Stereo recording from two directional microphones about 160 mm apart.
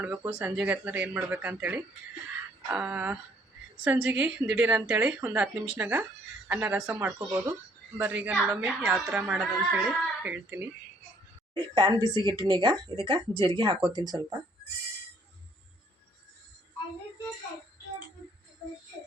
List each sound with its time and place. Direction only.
0.0 s a woman's voice: 15° right (ahead or behind)
11.7 s speech: 25° right (ahead or behind)